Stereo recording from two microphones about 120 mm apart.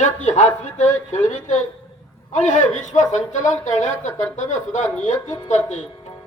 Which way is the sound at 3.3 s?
90° left.